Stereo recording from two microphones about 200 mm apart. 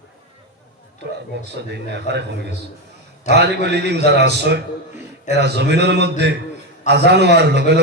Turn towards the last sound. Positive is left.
turn(degrees=-55)  # may be behind; listen again after turning